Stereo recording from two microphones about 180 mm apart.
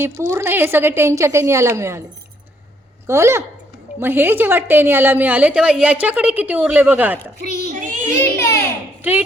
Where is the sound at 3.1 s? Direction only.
15° right (ahead or behind).